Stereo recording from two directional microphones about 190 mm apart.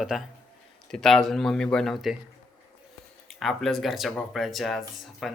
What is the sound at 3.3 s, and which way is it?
Speech, centre (ahead or behind).